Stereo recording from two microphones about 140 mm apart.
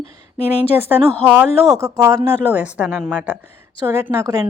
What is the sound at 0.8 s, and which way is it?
Speech, 15° right (ahead or behind).